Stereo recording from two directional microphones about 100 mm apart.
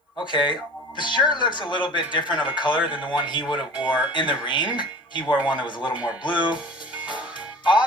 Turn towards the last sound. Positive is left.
turn(degrees=50)  # may be behind; listen again after turning